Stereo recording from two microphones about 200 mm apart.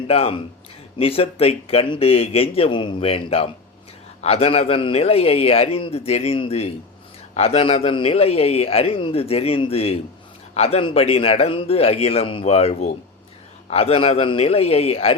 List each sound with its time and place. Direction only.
0.1 s a man's voice: 30° left (ahead or behind)